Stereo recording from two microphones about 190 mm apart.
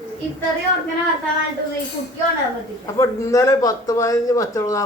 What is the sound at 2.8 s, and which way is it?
Speech, 15° left (ahead or behind).